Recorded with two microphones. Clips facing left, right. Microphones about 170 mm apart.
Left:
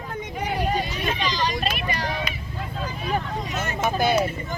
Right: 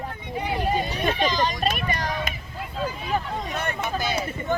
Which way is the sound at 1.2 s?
45° right (ahead or behind).